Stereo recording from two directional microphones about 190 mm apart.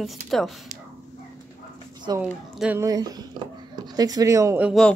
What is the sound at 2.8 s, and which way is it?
Speech, 20° right (ahead or behind).